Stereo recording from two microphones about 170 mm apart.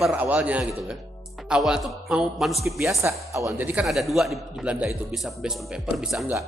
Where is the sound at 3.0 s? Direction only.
15° right (ahead or behind); by 6.4 s centre (ahead or behind).